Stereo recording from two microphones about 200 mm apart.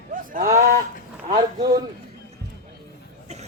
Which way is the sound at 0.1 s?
45° right (ahead or behind).